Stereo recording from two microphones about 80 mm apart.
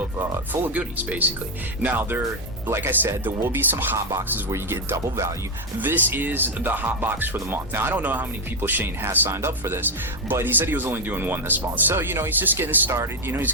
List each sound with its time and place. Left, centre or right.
0.2 s speech: right
3.9 s speech: right
5.8 s speech: right